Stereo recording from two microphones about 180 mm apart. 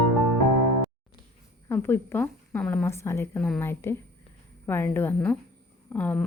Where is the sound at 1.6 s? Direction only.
10° left (ahead or behind).